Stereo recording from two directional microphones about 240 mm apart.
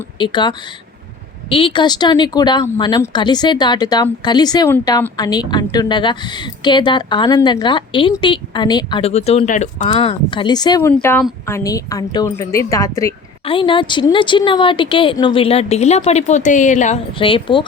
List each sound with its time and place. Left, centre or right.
0.2 s speech: centre